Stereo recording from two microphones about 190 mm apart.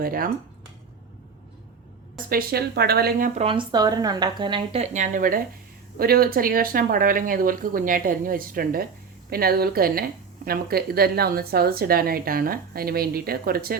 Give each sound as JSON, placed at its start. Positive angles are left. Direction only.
{"t": 0.0, "sound": "a woman's voice", "side_deg": -50}
{"t": 2.3, "sound": "speech", "side_deg": -55}
{"t": 3.4, "sound": "a woman's voice", "side_deg": -25}